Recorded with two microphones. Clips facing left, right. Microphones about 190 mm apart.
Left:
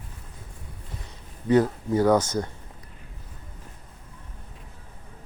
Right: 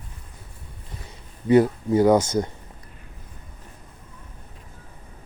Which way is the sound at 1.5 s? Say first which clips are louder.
Right 3 dB; 15° right (ahead or behind).